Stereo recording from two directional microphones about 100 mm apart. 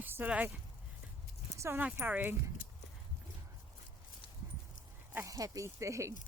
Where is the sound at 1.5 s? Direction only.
25° right (ahead or behind).